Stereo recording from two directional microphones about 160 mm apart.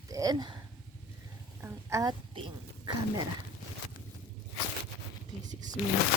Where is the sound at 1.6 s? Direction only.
15° right (ahead or behind).